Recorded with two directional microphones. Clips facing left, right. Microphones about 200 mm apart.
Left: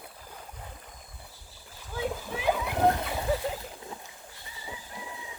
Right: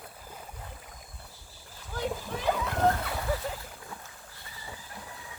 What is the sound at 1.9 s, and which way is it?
Splash, centre (ahead or behind).